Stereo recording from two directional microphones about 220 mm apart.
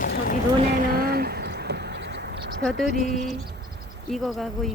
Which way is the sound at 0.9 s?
45° right (ahead or behind).